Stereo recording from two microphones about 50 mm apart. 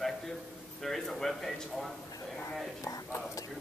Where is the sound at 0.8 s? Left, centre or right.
Centre.